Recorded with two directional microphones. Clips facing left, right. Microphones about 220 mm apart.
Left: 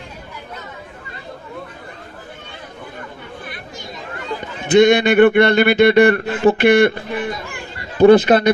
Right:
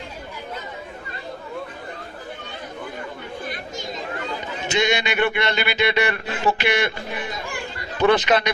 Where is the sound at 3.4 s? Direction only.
45° right (ahead or behind).